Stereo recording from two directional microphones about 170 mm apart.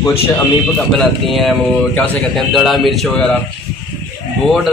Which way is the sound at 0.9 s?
Centre (ahead or behind).